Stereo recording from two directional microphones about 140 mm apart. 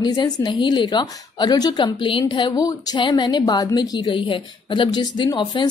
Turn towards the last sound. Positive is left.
turn(degrees=35)  # may be behind; listen again after turning